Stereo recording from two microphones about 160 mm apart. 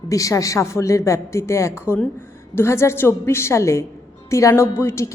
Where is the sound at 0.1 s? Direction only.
20° left (ahead or behind).